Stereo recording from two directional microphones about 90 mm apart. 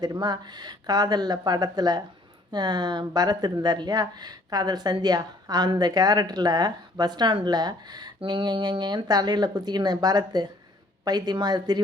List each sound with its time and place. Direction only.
0.0 s speech: 50° right (ahead or behind)